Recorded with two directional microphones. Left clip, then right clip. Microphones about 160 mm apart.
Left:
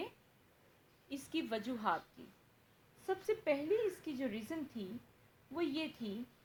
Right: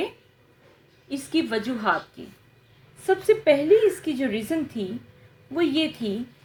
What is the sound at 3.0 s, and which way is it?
A woman's voice, 25° left (ahead or behind).